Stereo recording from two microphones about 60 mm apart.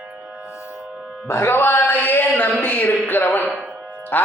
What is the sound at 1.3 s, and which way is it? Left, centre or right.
A man's voice, left.